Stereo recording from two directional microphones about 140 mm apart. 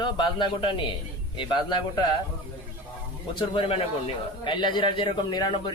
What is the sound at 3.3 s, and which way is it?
Speech, 35° left (ahead or behind).